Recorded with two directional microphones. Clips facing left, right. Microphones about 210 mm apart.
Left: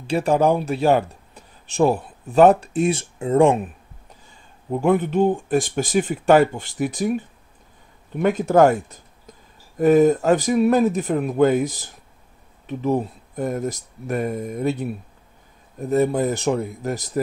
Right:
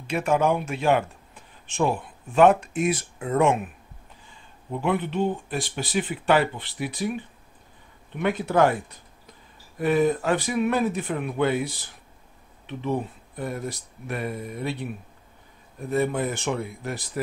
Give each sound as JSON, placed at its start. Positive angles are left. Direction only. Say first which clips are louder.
{"t": 0.0, "sound": "speech", "louder": "left 4 dB", "side_deg": 35}
{"t": 4.3, "sound": "speech", "louder": "left 7 dB", "side_deg": 45}